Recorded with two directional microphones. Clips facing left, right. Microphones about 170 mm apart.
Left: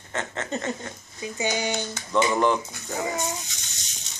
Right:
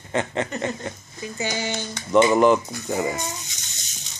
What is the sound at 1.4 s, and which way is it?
Speech, 20° left (ahead or behind).